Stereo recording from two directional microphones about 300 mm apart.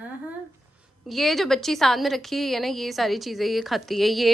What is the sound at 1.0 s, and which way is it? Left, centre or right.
A woman's voice, centre.